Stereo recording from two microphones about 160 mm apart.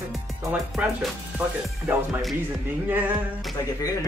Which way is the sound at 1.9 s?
10° right (ahead or behind).